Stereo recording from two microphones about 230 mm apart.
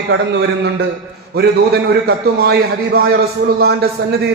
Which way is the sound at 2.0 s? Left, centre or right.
Right.